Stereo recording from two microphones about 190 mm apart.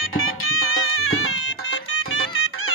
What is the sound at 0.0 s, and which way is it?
Music, 90° left.